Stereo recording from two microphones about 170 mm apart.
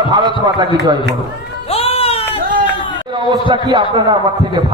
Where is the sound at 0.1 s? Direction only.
25° right (ahead or behind).